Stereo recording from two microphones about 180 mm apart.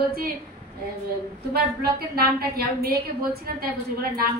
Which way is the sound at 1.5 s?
60° right (ahead or behind).